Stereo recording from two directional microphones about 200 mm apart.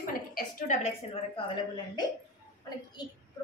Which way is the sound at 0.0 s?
45° left (ahead or behind).